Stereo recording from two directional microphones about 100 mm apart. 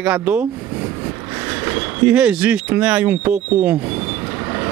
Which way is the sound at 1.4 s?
20° right (ahead or behind).